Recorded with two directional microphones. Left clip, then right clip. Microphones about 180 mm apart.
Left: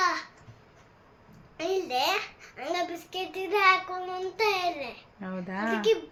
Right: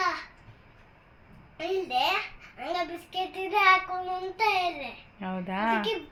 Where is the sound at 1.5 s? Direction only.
15° left (ahead or behind).